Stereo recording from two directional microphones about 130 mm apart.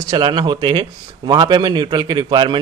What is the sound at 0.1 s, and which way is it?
A man's voice, 35° right (ahead or behind).